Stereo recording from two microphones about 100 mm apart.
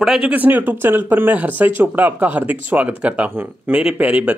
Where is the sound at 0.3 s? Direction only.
15° right (ahead or behind).